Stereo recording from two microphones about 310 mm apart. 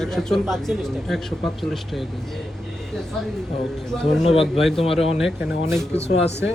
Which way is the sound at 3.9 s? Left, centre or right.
Centre.